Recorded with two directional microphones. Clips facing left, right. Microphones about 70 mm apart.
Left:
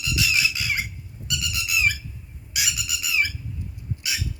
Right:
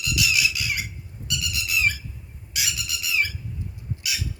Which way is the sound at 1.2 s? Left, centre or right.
Left.